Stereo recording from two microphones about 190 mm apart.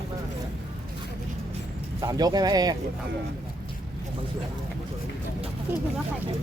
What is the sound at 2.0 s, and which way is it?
Speech, 20° right (ahead or behind).